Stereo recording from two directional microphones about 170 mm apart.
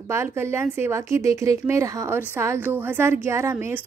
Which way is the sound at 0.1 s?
15° right (ahead or behind).